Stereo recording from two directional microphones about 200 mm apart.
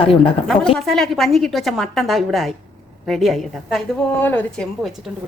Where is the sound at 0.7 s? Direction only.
Centre (ahead or behind).